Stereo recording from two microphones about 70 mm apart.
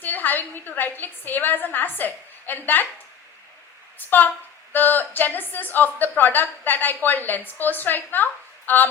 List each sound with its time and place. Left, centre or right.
0.0 s a woman's voice: left
3.9 s a woman's voice: left